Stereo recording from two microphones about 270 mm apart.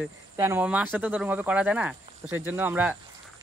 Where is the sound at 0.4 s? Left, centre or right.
Centre.